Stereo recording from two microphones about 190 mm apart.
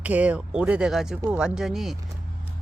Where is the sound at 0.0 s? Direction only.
5° right (ahead or behind).